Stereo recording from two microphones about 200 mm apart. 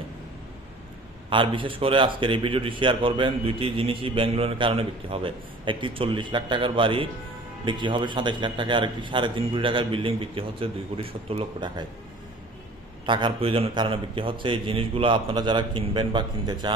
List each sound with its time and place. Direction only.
1.3 s a man's voice: 25° right (ahead or behind)
13.0 s a man's voice: 25° right (ahead or behind)